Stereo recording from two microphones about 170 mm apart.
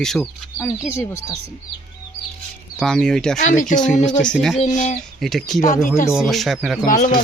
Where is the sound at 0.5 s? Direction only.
15° left (ahead or behind).